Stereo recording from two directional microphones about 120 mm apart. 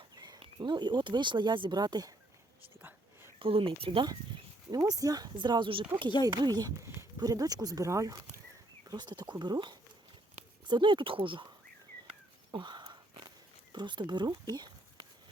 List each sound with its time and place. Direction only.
0.2 s speech: 35° right (ahead or behind)
3.3 s speech: 50° right (ahead or behind)
4.7 s speech: 30° right (ahead or behind); by 6.1 s 45° right (ahead or behind)
6.2 s speech: 35° right (ahead or behind)
12.5 s a sound: 40° right (ahead or behind)
13.7 s speech: 40° right (ahead or behind)